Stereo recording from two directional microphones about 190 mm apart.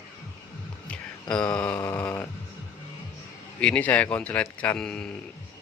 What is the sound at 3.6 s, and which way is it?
Speech, 5° left (ahead or behind).